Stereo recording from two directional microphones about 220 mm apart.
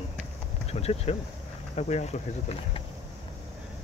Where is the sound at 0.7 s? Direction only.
30° left (ahead or behind).